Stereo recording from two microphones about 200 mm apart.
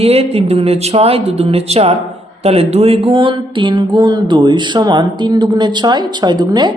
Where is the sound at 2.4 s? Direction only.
30° right (ahead or behind).